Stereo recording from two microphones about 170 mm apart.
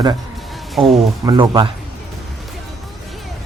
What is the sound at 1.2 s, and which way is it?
Speech, 25° right (ahead or behind).